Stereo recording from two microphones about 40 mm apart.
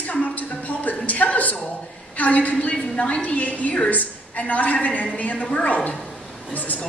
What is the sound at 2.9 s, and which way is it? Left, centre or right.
A woman's voice, left.